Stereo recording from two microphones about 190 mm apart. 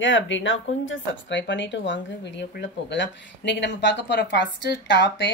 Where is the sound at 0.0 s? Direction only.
75° left (ahead or behind).